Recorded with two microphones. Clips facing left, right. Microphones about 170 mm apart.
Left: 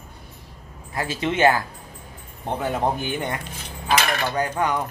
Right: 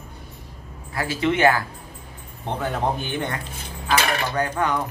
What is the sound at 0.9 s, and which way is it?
Speech, 20° left (ahead or behind).